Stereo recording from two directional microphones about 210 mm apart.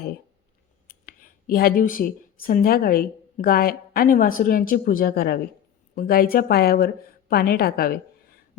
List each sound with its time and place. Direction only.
0.9 s speech: 40° left (ahead or behind)